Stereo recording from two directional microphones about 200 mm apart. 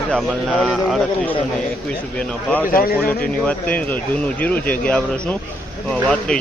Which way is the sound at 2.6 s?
45° left (ahead or behind).